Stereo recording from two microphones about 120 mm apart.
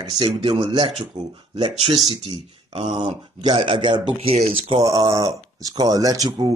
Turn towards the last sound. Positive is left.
turn(degrees=-30)  # may be behind; listen again after turning